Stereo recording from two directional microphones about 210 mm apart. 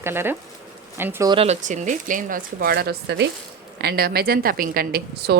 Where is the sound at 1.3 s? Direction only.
30° right (ahead or behind).